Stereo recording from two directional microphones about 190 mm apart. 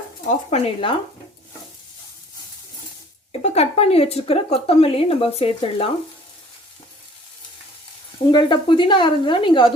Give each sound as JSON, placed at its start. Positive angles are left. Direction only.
{"t": 0.3, "sound": "speech", "side_deg": 35}
{"t": 3.4, "sound": "speech", "side_deg": 35}
{"t": 8.3, "sound": "speech", "side_deg": 25}